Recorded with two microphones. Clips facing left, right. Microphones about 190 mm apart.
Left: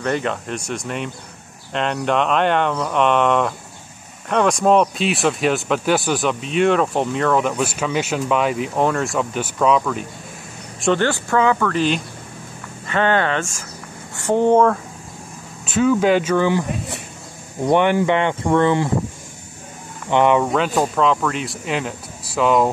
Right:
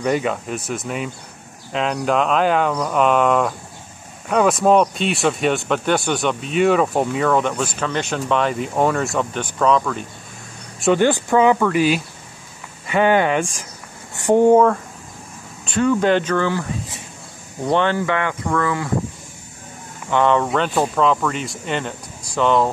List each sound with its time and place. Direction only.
0.0 s speech: 5° right (ahead or behind)
10.8 s speech: 10° right (ahead or behind); by 16.6 s 15° left (ahead or behind)
17.6 s speech: 15° left (ahead or behind)
20.1 s speech: 15° left (ahead or behind)
20.4 s speech: centre (ahead or behind)